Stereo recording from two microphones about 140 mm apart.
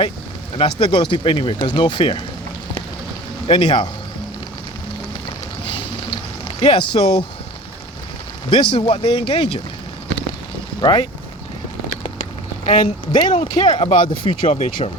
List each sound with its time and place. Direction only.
0.6 s speech: 40° left (ahead or behind)
3.4 s a man's voice: 45° left (ahead or behind)
5.6 s vehicle: 35° left (ahead or behind)
6.6 s speech: 40° left (ahead or behind)
8.4 s speech: 45° left (ahead or behind)
10.8 s speech: 30° left (ahead or behind)
12.2 s a sound: 65° left (ahead or behind)
13.3 s speech: 50° left (ahead or behind)
14.3 s speech: 55° left (ahead or behind)